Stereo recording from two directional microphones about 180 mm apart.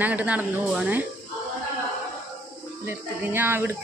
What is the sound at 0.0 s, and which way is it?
Speech, 10° right (ahead or behind).